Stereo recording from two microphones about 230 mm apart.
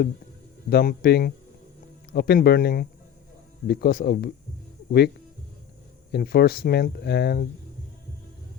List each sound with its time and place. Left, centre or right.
0.7 s speech: left